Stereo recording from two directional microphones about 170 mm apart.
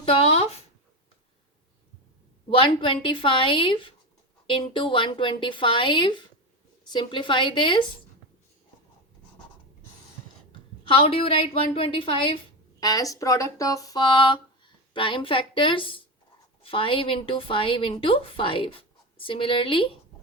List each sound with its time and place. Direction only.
0.0 s a sound: 35° left (ahead or behind)
2.5 s a woman's voice: 30° left (ahead or behind)
10.5 s a woman's voice: 30° left (ahead or behind)
12.8 s a woman's voice: 20° left (ahead or behind)